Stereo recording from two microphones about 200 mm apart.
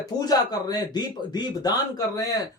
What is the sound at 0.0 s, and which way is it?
Speech, 20° left (ahead or behind).